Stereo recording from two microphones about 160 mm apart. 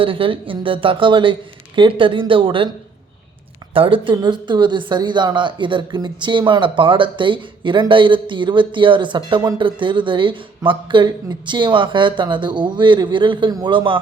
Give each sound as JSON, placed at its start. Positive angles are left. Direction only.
{"t": 0.0, "sound": "speech", "side_deg": -35}
{"t": 3.8, "sound": "speech", "side_deg": -35}